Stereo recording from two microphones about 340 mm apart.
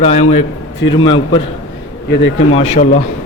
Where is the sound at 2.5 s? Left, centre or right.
Centre.